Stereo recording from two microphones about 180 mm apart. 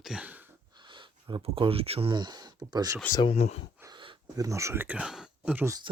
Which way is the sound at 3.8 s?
25° right (ahead or behind).